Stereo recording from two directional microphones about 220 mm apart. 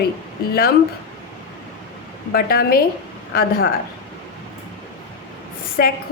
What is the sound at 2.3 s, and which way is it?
A woman's voice, 45° left (ahead or behind).